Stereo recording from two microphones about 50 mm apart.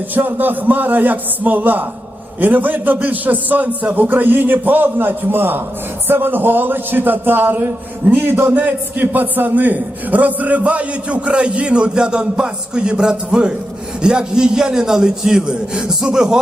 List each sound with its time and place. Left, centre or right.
0.1 s a man's voice: right
8.5 s a man's voice: right; by 16.4 s centre